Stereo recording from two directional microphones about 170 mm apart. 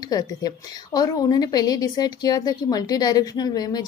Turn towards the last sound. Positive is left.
turn(degrees=25)  # may be behind; listen again after turning